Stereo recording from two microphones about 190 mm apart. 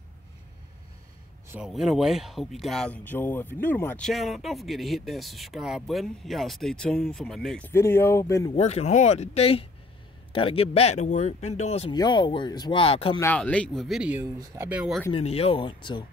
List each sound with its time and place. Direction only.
1.5 s speech: 5° right (ahead or behind); by 8.5 s 15° left (ahead or behind)
8.5 s speech: 35° left (ahead or behind)
11.9 s speech: 25° left (ahead or behind)
13.2 s speech: 5° left (ahead or behind)
14.2 s speech: 15° right (ahead or behind)
14.8 s speech: centre (ahead or behind)
15.1 s speech: 30° left (ahead or behind)